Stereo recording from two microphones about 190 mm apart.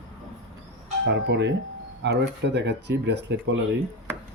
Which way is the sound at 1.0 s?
65° right (ahead or behind).